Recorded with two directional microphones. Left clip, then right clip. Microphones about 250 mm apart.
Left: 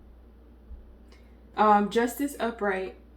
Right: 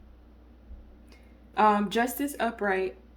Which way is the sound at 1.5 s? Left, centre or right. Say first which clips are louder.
Left 2 dB; right.